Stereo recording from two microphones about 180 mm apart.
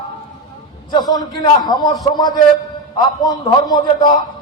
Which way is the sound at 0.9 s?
20° left (ahead or behind).